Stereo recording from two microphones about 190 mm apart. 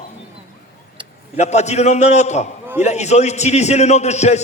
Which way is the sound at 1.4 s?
35° left (ahead or behind).